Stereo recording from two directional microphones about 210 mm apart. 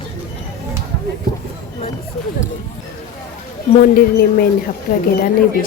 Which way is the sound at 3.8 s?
45° left (ahead or behind).